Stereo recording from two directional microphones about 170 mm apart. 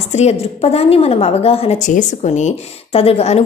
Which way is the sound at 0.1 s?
40° left (ahead or behind).